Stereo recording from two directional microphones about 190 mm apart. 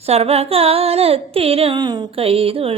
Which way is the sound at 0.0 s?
35° right (ahead or behind).